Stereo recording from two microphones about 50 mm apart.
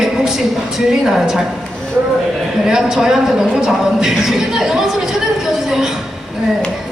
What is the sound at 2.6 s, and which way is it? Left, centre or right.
A man's voice, centre.